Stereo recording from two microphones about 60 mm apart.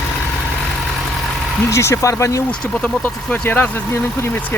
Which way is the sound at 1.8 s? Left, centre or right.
Left.